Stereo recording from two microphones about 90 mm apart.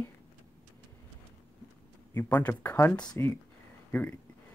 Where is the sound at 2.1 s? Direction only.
20° left (ahead or behind).